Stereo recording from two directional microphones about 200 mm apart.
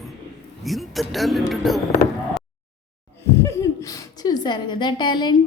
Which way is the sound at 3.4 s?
15° left (ahead or behind).